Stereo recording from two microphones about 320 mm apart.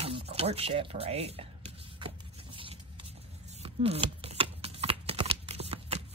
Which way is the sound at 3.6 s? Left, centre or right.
Centre.